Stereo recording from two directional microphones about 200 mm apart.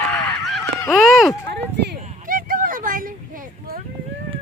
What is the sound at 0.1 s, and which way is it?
Honk, centre (ahead or behind).